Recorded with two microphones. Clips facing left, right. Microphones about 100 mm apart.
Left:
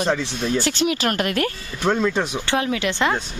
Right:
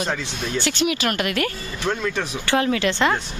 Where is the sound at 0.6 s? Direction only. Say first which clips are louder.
Right 1 dB; 35° left (ahead or behind).